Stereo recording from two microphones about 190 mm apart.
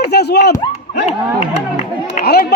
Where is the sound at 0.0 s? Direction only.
60° left (ahead or behind).